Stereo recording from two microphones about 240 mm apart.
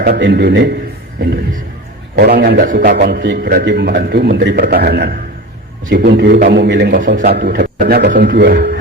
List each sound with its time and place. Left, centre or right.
0.0 s a man's voice: right
2.1 s a man's voice: right